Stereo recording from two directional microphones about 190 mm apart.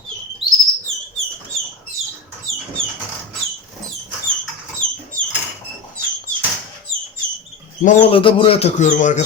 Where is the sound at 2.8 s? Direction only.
90° right.